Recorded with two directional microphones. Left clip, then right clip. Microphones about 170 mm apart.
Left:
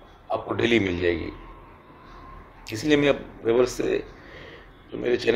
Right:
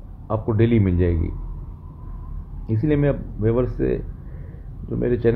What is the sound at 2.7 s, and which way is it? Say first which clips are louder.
Speech: left 1 dB; 40° left (ahead or behind).